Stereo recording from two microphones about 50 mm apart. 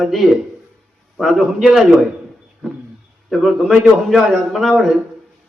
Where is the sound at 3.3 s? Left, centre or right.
Centre.